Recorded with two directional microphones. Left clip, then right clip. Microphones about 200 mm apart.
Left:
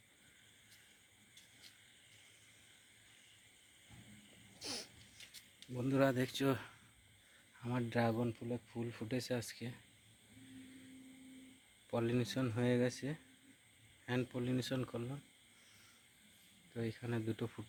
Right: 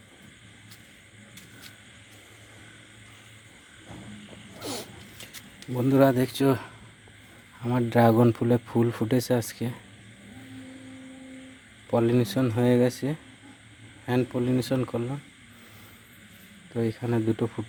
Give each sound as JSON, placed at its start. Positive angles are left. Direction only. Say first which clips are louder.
{"t": 4.6, "sound": "a sound", "louder": "right 10 dB", "side_deg": -5}
{"t": 5.5, "sound": "speech", "louder": "right 14 dB", "side_deg": -5}
{"t": 8.1, "sound": "speech", "louder": "right 19 dB", "side_deg": -30}
{"t": 11.9, "sound": "speech", "louder": "right 14 dB", "side_deg": -5}
{"t": 16.7, "sound": "speech", "louder": "right 15 dB", "side_deg": -5}